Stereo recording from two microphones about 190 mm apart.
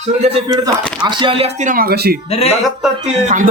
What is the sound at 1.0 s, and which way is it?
Speech, 25° right (ahead or behind).